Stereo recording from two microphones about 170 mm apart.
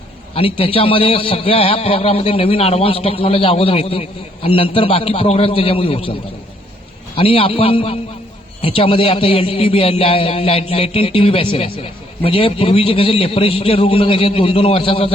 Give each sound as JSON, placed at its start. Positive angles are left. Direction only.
{"t": 0.3, "sound": "a man's voice", "side_deg": 35}
{"t": 7.2, "sound": "a man's voice", "side_deg": 35}